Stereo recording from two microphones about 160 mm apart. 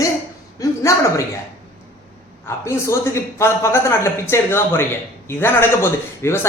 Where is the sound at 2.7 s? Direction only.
15° left (ahead or behind).